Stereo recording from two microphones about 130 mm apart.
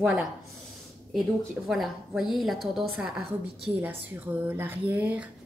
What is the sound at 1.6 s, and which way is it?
A woman's voice, centre (ahead or behind).